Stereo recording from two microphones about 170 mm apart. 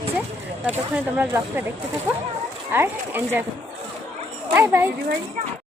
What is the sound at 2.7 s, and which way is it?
Speech, 15° right (ahead or behind).